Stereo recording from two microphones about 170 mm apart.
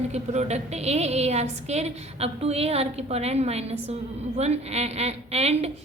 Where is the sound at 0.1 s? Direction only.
40° right (ahead or behind).